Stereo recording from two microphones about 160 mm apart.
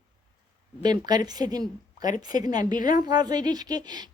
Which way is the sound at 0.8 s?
25° right (ahead or behind).